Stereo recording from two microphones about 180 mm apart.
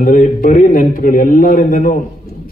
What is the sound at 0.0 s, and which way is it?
A man's voice, 50° left (ahead or behind).